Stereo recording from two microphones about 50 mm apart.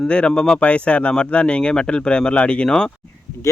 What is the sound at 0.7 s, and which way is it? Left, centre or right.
Speech, left.